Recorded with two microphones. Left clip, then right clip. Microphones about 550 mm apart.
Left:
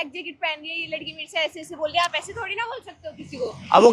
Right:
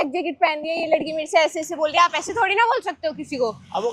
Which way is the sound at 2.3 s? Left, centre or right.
Right.